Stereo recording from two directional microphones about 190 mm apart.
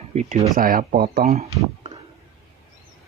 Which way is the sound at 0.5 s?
45° right (ahead or behind).